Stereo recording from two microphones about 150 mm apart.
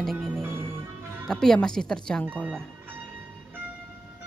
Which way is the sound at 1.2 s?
5° left (ahead or behind).